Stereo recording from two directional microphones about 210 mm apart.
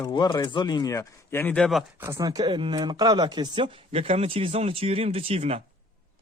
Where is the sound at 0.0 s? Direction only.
20° left (ahead or behind); by 1.8 s 5° left (ahead or behind).